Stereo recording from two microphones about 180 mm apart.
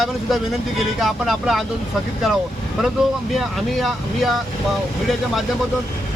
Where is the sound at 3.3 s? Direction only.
Centre (ahead or behind).